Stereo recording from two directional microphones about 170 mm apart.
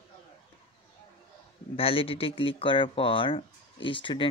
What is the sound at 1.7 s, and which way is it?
Speech, 35° left (ahead or behind).